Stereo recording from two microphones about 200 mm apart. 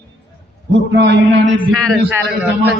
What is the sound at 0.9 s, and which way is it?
Speech, 60° right (ahead or behind).